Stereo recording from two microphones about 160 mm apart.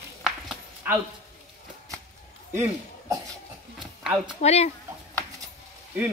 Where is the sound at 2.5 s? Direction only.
15° right (ahead or behind).